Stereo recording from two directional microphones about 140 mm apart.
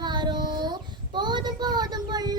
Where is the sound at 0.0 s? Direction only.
30° right (ahead or behind).